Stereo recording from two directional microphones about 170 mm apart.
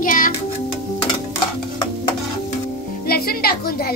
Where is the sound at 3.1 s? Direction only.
65° left (ahead or behind).